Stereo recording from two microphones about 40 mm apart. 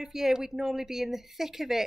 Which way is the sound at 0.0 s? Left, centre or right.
Centre.